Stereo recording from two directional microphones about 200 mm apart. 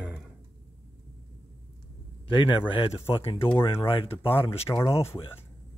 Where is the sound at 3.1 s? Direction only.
25° left (ahead or behind).